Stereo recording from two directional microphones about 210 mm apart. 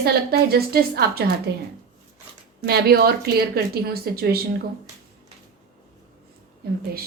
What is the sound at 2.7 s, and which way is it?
A woman's voice, 50° right (ahead or behind).